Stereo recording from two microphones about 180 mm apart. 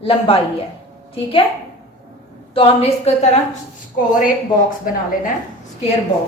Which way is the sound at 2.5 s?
30° left (ahead or behind).